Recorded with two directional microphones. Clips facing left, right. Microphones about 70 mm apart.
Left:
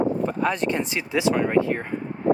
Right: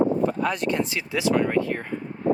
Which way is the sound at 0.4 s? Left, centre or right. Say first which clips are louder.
Left 1 dB; left.